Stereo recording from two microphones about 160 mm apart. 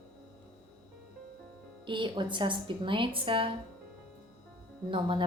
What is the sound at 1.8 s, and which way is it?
Speech, 30° right (ahead or behind).